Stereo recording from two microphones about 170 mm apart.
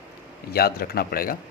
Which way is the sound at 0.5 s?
65° left (ahead or behind).